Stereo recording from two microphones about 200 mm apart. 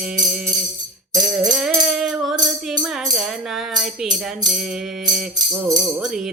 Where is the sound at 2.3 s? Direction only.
20° right (ahead or behind).